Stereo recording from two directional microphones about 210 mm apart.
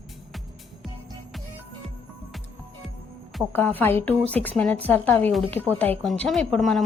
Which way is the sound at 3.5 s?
10° left (ahead or behind).